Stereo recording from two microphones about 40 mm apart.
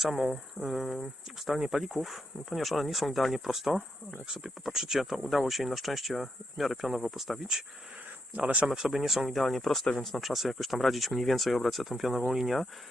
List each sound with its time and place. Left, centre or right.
0.0 s speech: centre
4.3 s speech: centre
4.6 s speech: centre
8.4 s speech: right
8.7 s speech: centre